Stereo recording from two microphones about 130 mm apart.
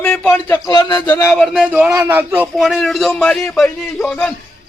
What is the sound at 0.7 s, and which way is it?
Speech, 35° left (ahead or behind).